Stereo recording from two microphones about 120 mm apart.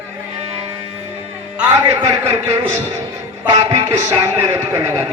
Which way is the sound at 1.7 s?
25° right (ahead or behind).